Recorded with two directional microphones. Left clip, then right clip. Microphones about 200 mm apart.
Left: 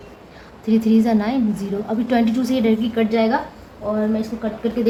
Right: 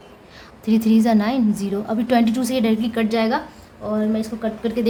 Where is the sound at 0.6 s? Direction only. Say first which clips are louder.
Left 1 dB; 35° right (ahead or behind).